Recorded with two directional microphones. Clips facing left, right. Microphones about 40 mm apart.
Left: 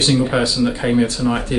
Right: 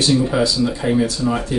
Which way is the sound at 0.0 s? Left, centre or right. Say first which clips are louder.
Even; left.